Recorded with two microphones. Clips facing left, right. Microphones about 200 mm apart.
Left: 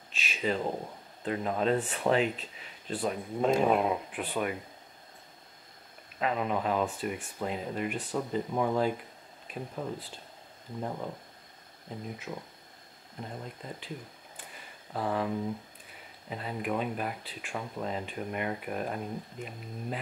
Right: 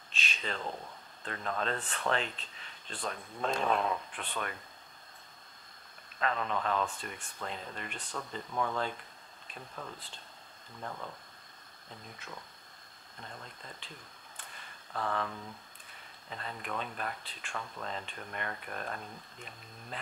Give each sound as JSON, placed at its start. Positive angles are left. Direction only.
{"t": 0.1, "sound": "a sound", "side_deg": 5}
{"t": 0.7, "sound": "speech", "side_deg": 35}
{"t": 1.2, "sound": "speech", "side_deg": 10}
{"t": 6.1, "sound": "speech", "side_deg": 10}
{"t": 9.9, "sound": "speech", "side_deg": 5}
{"t": 10.8, "sound": "speech", "side_deg": 20}
{"t": 11.9, "sound": "speech", "side_deg": 10}
{"t": 14.4, "sound": "a sound", "side_deg": 10}
{"t": 15.9, "sound": "speech", "side_deg": 10}